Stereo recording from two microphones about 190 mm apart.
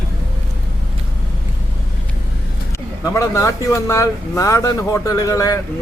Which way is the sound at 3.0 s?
15° left (ahead or behind).